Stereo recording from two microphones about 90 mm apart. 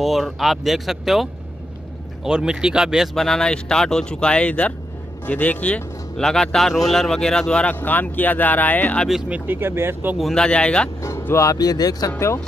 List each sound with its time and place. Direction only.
0.0 s speech: centre (ahead or behind); by 9.0 s 20° left (ahead or behind)
9.3 s speech: 25° right (ahead or behind)
10.1 s speech: 5° left (ahead or behind)
11.0 s speech: 35° left (ahead or behind)
11.5 s speech: 45° left (ahead or behind)